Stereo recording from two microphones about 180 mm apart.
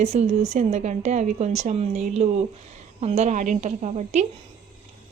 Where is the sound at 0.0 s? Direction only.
40° right (ahead or behind).